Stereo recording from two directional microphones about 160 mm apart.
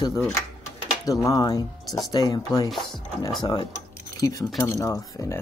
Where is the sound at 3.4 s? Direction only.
25° left (ahead or behind).